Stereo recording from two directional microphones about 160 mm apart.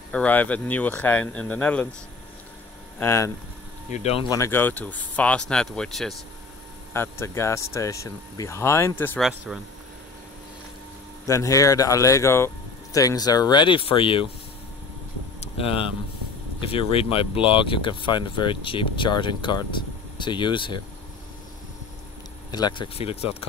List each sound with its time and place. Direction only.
0.1 s speech: 10° left (ahead or behind)
3.0 s speech: 20° left (ahead or behind)
3.9 s speech: 40° left (ahead or behind)
4.3 s speech: 15° left (ahead or behind)
6.9 s speech: 15° left (ahead or behind)
9.5 s speech: 5° right (ahead or behind)
11.2 s speech: 20° left (ahead or behind)
15.4 s speech: 35° left (ahead or behind)
22.5 s speech: 25° left (ahead or behind)